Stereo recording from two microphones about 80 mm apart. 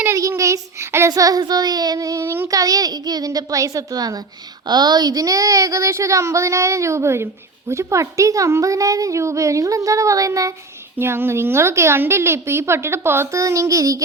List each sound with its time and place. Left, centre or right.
0.1 s a sound: right
1.1 s speech: right
2.2 s speech: right
2.5 s speech: right
4.6 s speech: right
10.9 s speech: right
13.4 s speech: right